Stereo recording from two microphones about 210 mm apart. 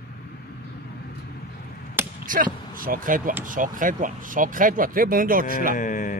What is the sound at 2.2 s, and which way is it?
Speech, 40° right (ahead or behind).